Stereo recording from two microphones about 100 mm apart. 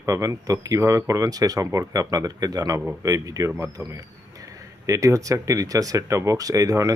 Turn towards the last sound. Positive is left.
turn(degrees=-35)  # may be behind; listen again after turning